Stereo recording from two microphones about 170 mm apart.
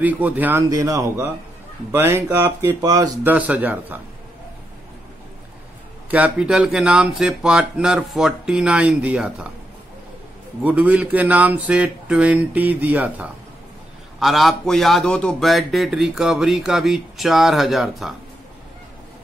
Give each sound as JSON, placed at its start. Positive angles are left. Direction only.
{"t": 0.0, "sound": "speech", "side_deg": -10}
{"t": 3.3, "sound": "speech", "side_deg": -10}
{"t": 6.0, "sound": "a man's voice", "side_deg": -10}
{"t": 10.6, "sound": "a man's voice", "side_deg": -10}